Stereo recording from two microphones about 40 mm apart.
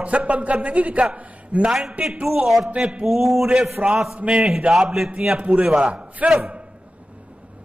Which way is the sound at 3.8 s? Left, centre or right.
Right.